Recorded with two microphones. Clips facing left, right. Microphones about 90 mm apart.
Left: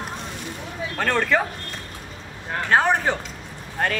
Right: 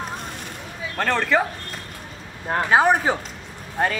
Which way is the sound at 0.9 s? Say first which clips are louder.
Right 1 dB; centre (ahead or behind).